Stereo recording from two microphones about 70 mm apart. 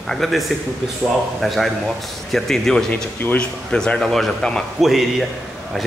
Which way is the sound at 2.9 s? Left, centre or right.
Left.